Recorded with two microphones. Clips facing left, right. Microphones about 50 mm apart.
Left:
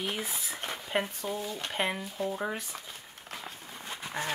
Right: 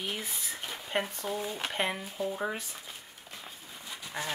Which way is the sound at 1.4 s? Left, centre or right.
Centre.